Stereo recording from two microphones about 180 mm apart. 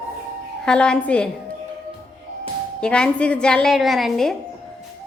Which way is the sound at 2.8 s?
5° left (ahead or behind).